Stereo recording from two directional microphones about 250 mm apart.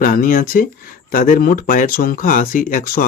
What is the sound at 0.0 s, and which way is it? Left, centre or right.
Speech, left.